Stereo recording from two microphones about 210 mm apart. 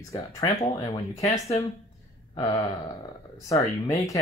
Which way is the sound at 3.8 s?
15° left (ahead or behind).